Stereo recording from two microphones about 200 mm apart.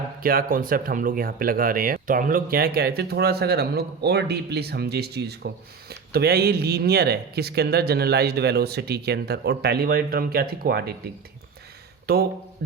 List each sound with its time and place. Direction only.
0.2 s speech: 45° right (ahead or behind)
12.1 s speech: 50° right (ahead or behind)